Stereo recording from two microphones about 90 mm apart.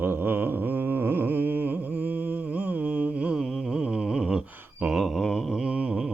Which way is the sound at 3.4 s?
5° right (ahead or behind).